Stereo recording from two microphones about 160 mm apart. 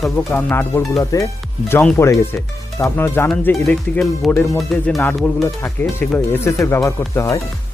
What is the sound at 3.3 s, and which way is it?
Speech, 5° left (ahead or behind).